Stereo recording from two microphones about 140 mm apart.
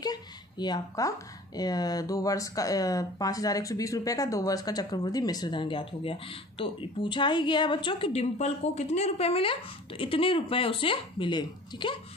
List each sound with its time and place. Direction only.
0.0 s speech: 30° left (ahead or behind)